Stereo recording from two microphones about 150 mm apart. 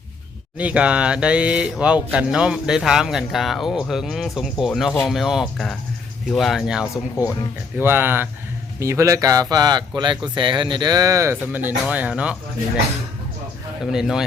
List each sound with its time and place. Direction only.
0.6 s speech: 5° right (ahead or behind)
6.9 s speech: 20° left (ahead or behind)
7.8 s speech: 15° right (ahead or behind)
13.9 s speech: 5° right (ahead or behind)